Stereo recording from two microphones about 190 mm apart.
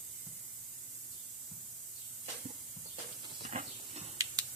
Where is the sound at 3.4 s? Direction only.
35° right (ahead or behind).